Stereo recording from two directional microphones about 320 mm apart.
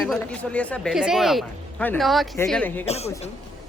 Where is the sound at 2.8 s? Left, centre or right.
Centre.